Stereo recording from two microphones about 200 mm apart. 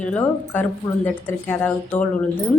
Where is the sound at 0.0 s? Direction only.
10° left (ahead or behind).